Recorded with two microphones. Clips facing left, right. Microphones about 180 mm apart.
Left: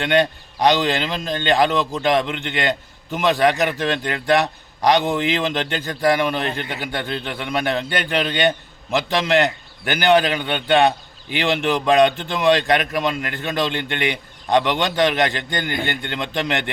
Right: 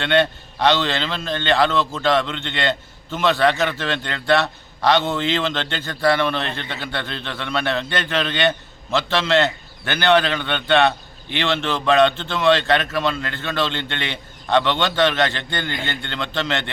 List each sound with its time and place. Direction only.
0.0 s a man's voice: 15° left (ahead or behind)